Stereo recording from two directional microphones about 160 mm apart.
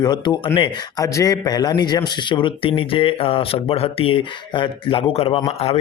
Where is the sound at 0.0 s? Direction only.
25° left (ahead or behind).